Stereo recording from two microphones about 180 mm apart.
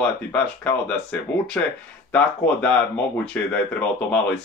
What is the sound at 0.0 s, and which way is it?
Speech, 5° left (ahead or behind).